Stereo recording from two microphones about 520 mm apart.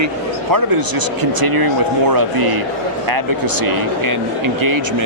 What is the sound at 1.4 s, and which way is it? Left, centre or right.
Speech, right.